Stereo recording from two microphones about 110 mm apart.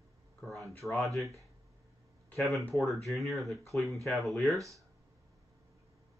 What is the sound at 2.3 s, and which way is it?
Speech, centre (ahead or behind).